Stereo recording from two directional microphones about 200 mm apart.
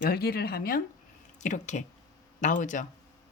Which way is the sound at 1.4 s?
35° left (ahead or behind).